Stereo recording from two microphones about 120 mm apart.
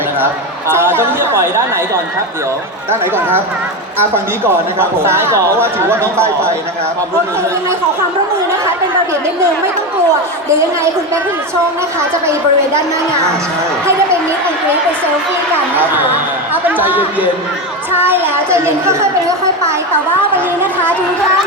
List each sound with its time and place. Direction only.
0.7 s speech: 20° right (ahead or behind)
2.9 s speech: 20° right (ahead or behind)
4.8 s speech: 20° right (ahead or behind)
12.2 s speech: 25° right (ahead or behind)
15.7 s speech: 15° right (ahead or behind)